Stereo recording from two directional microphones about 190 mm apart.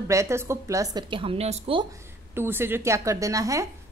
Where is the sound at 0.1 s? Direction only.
15° right (ahead or behind); by 1.9 s 30° right (ahead or behind).